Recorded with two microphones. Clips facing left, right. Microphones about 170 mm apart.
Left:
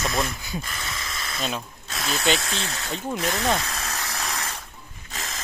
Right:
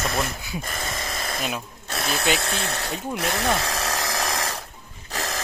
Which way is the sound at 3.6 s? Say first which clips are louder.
Right 6 dB; 85° right.